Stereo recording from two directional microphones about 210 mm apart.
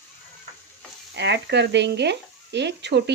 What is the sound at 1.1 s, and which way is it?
Speech, 55° right (ahead or behind).